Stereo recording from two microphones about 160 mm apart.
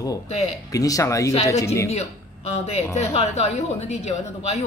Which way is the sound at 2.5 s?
40° left (ahead or behind).